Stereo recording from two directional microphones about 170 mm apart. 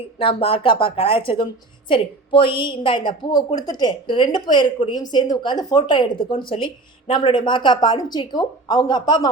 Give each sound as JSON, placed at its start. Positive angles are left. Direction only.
{"t": 0.2, "sound": "a woman's voice", "side_deg": 30}